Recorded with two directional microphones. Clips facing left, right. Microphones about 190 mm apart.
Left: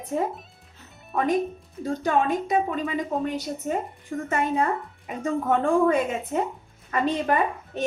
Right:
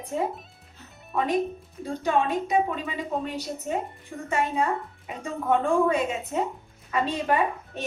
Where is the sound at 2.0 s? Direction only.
50° left (ahead or behind).